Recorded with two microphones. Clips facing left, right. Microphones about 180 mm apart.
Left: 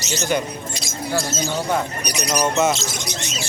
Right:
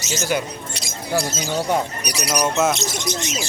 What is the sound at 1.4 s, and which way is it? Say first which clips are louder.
Speech: right 1 dB; 10° right (ahead or behind).